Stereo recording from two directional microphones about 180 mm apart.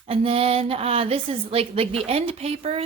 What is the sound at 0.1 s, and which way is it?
A woman's voice, 30° right (ahead or behind).